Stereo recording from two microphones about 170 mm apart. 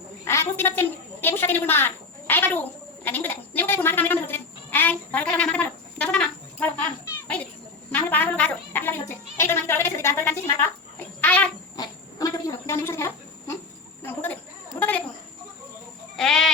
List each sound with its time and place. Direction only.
0.3 s a sound: 15° left (ahead or behind)
11.8 s insect: 20° left (ahead or behind)
14.0 s cricket: 10° left (ahead or behind)
14.8 s chicken: 10° left (ahead or behind)
16.1 s goat: centre (ahead or behind)